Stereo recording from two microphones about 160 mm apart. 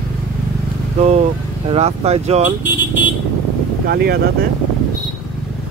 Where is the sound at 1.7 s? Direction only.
40° right (ahead or behind).